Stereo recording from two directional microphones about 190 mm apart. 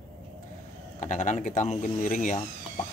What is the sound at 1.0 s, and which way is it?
Speech, 40° left (ahead or behind).